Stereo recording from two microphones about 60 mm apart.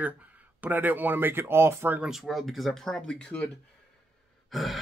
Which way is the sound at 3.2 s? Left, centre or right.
Left.